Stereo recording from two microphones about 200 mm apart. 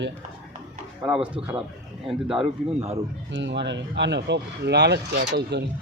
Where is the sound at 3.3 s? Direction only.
65° right (ahead or behind).